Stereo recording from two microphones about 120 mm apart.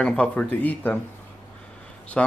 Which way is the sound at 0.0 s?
5° left (ahead or behind).